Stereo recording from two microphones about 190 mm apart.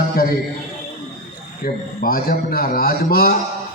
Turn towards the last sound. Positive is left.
turn(degrees=50)  # may be behind; listen again after turning